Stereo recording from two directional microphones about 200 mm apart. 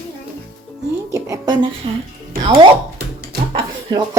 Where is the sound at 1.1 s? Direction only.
20° right (ahead or behind).